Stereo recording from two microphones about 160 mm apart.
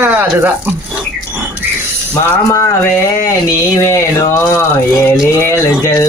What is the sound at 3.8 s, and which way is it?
Speech, 20° left (ahead or behind).